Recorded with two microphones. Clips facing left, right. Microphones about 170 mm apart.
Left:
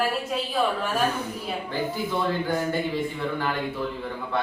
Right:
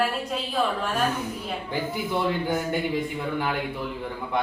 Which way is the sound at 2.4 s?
15° right (ahead or behind).